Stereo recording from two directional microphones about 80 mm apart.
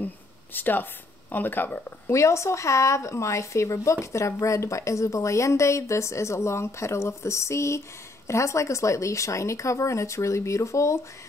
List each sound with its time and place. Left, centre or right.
0.0 s a sound: left
1.3 s speech: left
2.0 s speech: left